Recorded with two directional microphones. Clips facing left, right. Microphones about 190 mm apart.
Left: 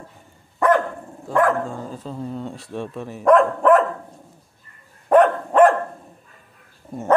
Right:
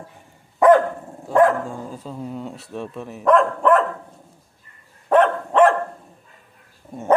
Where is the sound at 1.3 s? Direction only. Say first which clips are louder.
Right 3 dB; 20° right (ahead or behind).